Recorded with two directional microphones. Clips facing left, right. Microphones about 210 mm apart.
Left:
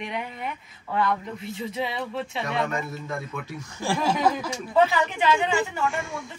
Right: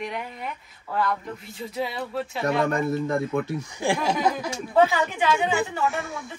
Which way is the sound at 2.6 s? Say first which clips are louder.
Right 7 dB; 50° right (ahead or behind).